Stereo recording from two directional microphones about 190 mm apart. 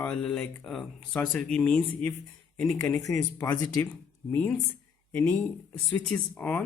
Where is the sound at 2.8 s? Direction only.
15° left (ahead or behind).